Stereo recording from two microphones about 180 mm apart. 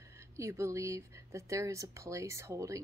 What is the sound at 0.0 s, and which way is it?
Speech, 15° right (ahead or behind).